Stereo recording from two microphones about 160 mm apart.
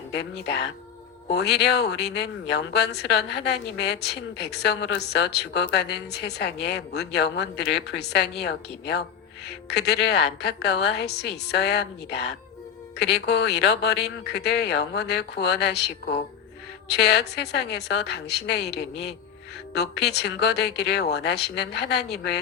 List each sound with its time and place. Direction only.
0.1 s speech: 90° left